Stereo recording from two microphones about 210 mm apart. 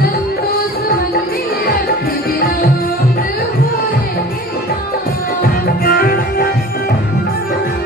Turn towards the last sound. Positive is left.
turn(degrees=45)  # may be behind; listen again after turning